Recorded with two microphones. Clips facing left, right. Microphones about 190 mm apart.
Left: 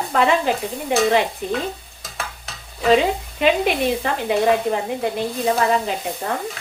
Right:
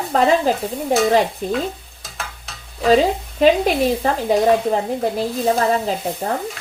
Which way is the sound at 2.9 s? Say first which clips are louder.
Right 2 dB; 40° right (ahead or behind).